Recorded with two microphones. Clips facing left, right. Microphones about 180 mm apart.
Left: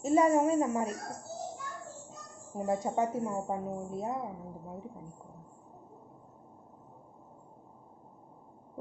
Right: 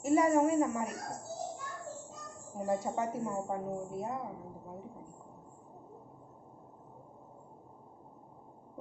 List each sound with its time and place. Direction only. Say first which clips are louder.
0.0 s speech: left 1 dB; 25° left (ahead or behind)
2.5 s speech: left 1 dB; 20° left (ahead or behind)